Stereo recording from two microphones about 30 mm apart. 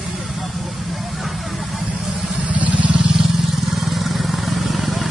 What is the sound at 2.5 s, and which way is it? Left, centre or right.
Vehicle, right.